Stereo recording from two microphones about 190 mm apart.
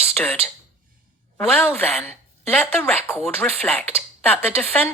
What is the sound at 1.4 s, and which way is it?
Speech, centre (ahead or behind).